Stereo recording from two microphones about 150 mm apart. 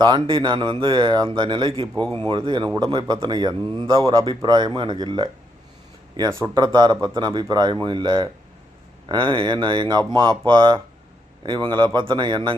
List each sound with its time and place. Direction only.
0.0 s speech: 30° right (ahead or behind)